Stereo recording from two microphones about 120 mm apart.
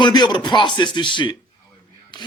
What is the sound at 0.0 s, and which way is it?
A man's voice, 40° left (ahead or behind).